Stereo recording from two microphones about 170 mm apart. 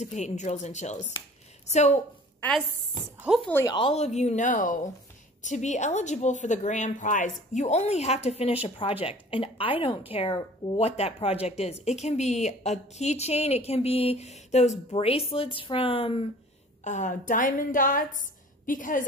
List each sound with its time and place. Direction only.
0.0 s a woman's voice: 45° left (ahead or behind)
3.2 s speech: 5° right (ahead or behind)
3.6 s a woman's voice: 30° left (ahead or behind)
16.8 s a woman's voice: 45° left (ahead or behind)